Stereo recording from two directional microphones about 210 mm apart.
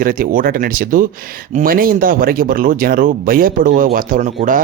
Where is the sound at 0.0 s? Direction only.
45° right (ahead or behind).